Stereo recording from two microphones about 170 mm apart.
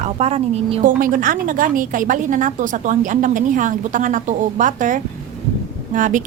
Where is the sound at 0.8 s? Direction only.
50° right (ahead or behind).